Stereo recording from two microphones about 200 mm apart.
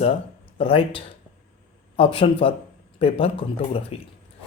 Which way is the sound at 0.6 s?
25° left (ahead or behind).